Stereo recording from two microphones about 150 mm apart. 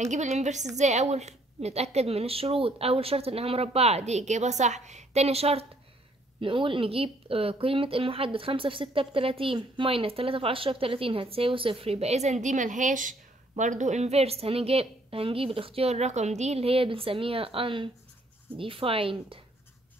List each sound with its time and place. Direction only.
0.0 s a woman's voice: 50° right (ahead or behind)